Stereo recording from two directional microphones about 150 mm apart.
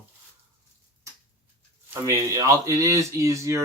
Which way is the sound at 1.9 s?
20° right (ahead or behind).